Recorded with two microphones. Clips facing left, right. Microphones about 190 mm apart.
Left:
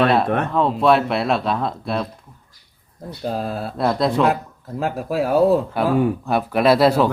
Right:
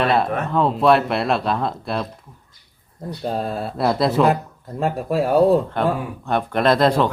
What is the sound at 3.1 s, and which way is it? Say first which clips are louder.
Speech: even; centre (ahead or behind).